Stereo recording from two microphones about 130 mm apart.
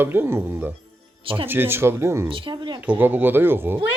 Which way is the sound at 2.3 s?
40° right (ahead or behind).